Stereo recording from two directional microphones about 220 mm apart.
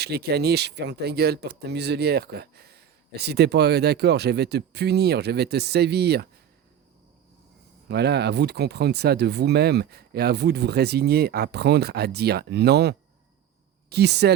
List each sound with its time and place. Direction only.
0.0 s speech: 45° right (ahead or behind)
7.9 s speech: 50° right (ahead or behind)